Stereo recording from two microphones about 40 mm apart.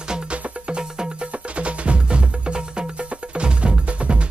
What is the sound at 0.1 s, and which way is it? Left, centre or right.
Music, right.